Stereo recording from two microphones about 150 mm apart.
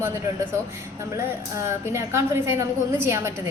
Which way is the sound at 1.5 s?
20° right (ahead or behind).